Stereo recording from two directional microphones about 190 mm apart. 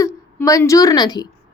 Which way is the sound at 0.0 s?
15° left (ahead or behind).